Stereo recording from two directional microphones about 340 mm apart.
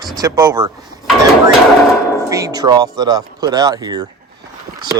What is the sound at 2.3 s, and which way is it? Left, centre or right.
Speech, centre.